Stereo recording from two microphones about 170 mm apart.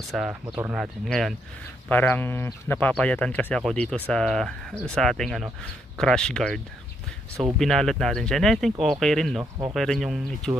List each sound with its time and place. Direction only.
0.1 s speech: centre (ahead or behind)
9.4 s speech: 25° right (ahead or behind)
9.8 s speech: centre (ahead or behind)